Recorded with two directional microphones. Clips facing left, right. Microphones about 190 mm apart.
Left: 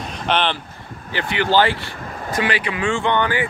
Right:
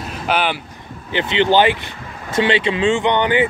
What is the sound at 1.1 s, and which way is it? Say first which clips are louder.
Speech: right 3 dB; 20° right (ahead or behind).